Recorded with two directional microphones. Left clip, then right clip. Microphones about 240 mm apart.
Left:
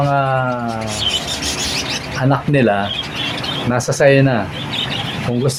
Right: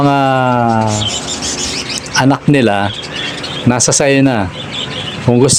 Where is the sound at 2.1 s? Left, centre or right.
Right.